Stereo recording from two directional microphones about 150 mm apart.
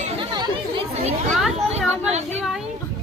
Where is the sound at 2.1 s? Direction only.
45° right (ahead or behind).